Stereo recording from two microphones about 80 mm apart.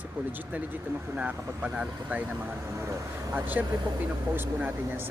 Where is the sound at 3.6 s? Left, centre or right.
Right.